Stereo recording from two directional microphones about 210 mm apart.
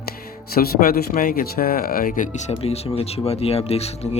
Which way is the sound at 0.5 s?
45° left (ahead or behind).